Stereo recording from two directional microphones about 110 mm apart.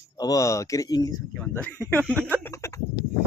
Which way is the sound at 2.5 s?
30° left (ahead or behind).